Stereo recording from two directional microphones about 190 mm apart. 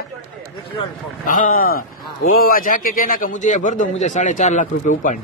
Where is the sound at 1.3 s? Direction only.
45° left (ahead or behind).